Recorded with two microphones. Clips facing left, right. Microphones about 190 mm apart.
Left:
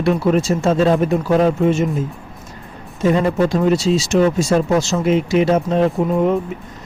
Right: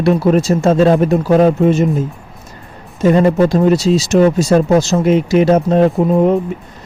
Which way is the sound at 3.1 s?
40° right (ahead or behind).